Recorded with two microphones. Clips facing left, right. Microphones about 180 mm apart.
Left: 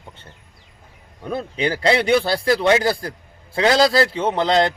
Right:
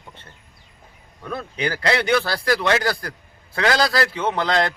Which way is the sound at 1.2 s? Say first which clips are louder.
Left 3 dB; 25° left (ahead or behind).